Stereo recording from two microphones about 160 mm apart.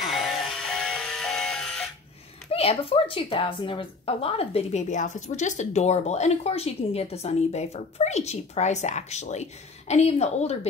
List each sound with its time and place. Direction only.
0.0 s music: centre (ahead or behind)
2.5 s a woman's voice: 40° left (ahead or behind)